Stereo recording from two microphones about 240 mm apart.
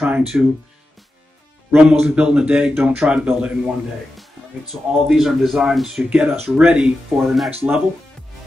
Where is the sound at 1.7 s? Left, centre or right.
Centre.